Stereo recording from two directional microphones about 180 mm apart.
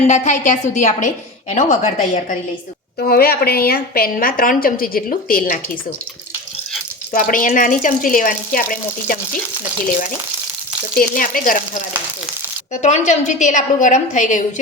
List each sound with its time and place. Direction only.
0.1 s a woman's voice: 40° left (ahead or behind)
3.0 s a woman's voice: 55° left (ahead or behind)
7.1 s a woman's voice: 50° left (ahead or behind)
10.9 s a woman's voice: 50° left (ahead or behind)
12.8 s a woman's voice: 40° left (ahead or behind)